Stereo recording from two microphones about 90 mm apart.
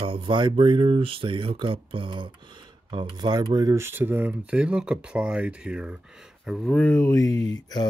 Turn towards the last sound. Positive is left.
turn(degrees=45)  # may be behind; listen again after turning